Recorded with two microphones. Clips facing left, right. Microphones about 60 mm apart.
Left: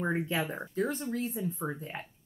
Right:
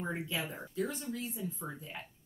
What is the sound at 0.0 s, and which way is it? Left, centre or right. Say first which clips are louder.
Speech: left 6 dB; left.